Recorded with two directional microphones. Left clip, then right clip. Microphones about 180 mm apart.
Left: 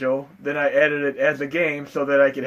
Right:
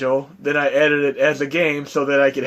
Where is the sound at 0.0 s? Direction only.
45° right (ahead or behind).